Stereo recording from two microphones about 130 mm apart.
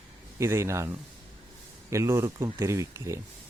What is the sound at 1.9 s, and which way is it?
Speech, 20° right (ahead or behind).